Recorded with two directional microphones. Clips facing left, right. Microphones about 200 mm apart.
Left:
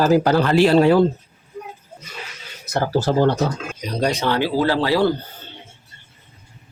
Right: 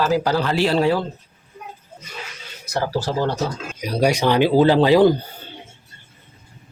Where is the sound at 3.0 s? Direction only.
55° left (ahead or behind).